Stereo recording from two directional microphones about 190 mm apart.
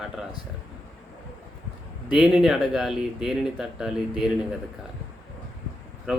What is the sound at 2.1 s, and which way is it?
Speech, 5° right (ahead or behind).